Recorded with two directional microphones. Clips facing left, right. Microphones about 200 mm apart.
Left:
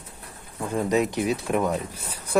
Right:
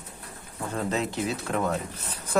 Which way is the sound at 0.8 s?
15° left (ahead or behind).